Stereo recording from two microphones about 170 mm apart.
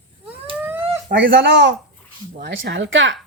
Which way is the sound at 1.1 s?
75° right (ahead or behind).